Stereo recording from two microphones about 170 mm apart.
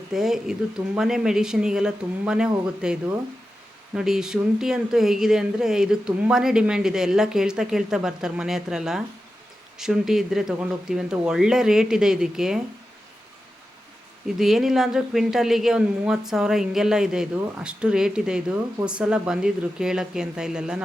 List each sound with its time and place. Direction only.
0.1 s speech: centre (ahead or behind)
14.3 s speech: centre (ahead or behind)